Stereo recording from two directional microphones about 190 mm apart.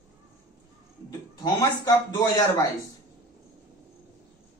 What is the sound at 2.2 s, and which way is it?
Speech, 15° left (ahead or behind).